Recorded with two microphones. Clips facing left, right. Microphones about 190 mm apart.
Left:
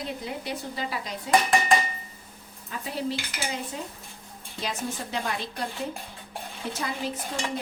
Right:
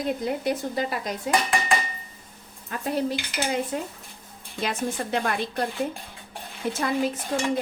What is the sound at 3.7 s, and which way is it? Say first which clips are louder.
Speech: right 6 dB; 55° right (ahead or behind).